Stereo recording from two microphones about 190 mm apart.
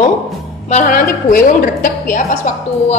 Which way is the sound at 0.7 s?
40° left (ahead or behind).